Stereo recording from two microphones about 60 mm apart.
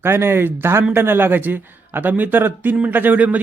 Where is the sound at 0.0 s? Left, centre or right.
Right.